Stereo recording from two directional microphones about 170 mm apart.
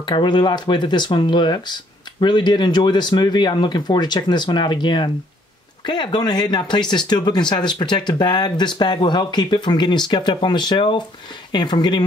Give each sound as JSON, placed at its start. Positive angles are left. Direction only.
{"t": 0.0, "sound": "speech", "side_deg": 25}